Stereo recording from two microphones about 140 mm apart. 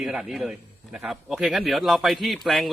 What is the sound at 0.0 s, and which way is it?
A man's voice, 5° right (ahead or behind).